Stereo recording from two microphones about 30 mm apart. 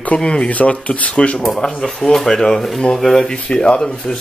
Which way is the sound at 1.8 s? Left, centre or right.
Centre.